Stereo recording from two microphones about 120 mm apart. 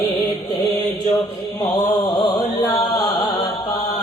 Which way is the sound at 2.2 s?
30° left (ahead or behind).